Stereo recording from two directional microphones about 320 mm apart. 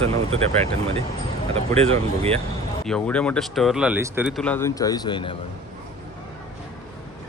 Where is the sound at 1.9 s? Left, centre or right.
Centre.